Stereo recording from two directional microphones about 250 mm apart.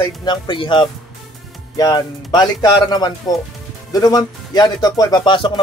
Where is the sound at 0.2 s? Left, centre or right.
Centre.